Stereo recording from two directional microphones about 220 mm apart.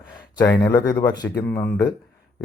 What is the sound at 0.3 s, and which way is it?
Speech, 15° left (ahead or behind).